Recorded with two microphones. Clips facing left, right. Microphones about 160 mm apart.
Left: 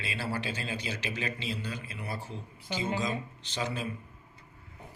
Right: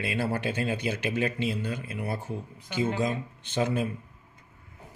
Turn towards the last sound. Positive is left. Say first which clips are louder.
# right 7 dB
turn(degrees=-55)  # may be behind; listen again after turning